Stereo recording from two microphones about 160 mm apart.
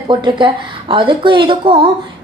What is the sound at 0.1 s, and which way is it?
A woman's voice, 30° right (ahead or behind).